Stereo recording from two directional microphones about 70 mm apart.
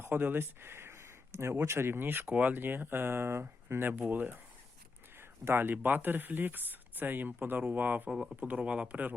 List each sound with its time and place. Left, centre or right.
0.0 s speech: right
5.5 s speech: right
8.1 s speech: centre
8.4 s speech: right